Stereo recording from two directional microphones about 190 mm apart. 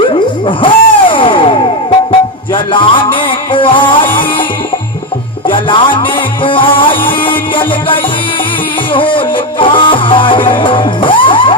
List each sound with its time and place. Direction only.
0.1 s music: 25° left (ahead or behind)
2.7 s music: 25° left (ahead or behind)
5.5 s music: 25° left (ahead or behind)